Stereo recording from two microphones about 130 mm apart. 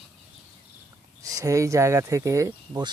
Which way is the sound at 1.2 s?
25° right (ahead or behind).